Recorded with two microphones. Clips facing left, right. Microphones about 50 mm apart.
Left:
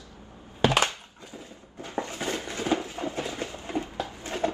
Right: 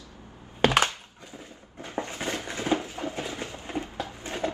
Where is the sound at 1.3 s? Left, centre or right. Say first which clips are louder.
Left 1 dB; right.